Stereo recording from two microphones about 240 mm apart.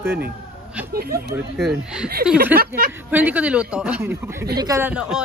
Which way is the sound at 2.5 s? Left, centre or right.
Right.